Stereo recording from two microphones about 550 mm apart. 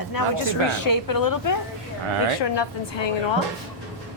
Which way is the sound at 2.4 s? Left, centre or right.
Left.